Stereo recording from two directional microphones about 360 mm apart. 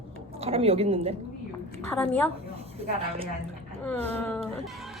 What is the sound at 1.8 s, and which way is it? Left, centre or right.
Speech, centre.